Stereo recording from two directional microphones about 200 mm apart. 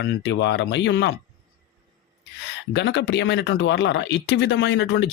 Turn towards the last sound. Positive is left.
turn(degrees=60)  # may be behind; listen again after turning